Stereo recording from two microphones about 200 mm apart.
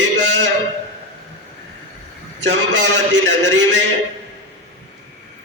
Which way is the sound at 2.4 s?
65° right (ahead or behind).